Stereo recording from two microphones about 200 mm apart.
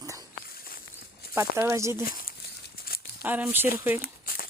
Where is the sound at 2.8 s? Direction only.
50° left (ahead or behind).